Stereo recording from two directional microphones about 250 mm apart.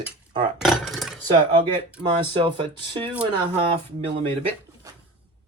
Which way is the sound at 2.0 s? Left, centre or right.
Centre.